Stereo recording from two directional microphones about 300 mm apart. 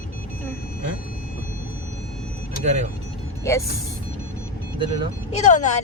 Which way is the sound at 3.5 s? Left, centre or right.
Centre.